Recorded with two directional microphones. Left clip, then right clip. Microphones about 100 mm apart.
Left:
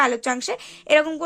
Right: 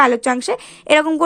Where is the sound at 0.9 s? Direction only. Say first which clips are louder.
Right 4 dB; 45° right (ahead or behind).